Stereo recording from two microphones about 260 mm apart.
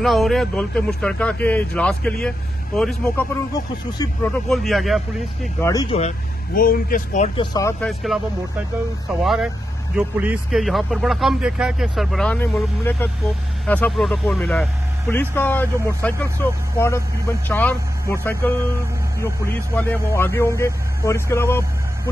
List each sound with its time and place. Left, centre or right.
0.0 s a man's voice: centre
5.7 s speech: centre; by 7.2 s left
7.3 s speech: centre
9.2 s a man's voice: centre